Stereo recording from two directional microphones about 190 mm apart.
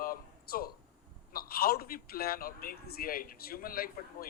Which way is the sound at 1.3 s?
50° left (ahead or behind).